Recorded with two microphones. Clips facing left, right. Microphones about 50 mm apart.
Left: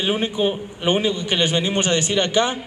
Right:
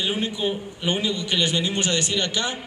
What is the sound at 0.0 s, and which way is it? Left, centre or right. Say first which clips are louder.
A man's voice: left 5 dB; left.